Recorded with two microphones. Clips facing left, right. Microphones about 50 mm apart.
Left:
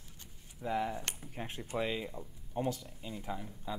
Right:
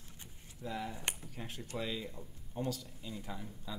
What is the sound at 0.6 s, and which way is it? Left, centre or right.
Speech, left.